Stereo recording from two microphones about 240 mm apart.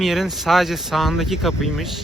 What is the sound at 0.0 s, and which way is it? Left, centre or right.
Speech, centre.